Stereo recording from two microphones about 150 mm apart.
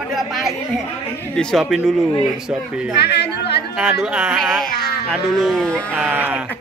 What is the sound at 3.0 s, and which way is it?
Speech, 90° left.